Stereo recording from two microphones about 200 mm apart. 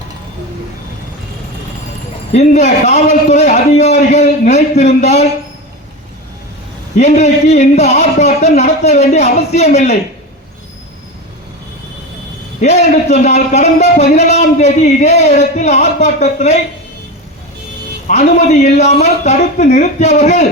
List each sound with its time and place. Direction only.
2.3 s speech: 35° left (ahead or behind)
6.9 s speech: 35° left (ahead or behind)
12.5 s speech: 35° left (ahead or behind)
18.1 s speech: 35° left (ahead or behind)